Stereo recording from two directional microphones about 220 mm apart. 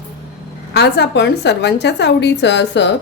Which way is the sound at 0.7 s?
50° left (ahead or behind).